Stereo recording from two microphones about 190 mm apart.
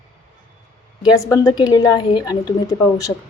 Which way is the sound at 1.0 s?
20° left (ahead or behind).